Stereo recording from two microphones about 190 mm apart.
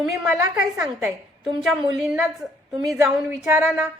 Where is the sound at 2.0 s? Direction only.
Centre (ahead or behind).